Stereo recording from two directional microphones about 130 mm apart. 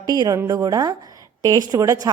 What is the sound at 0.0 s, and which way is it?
A woman's voice, 30° right (ahead or behind).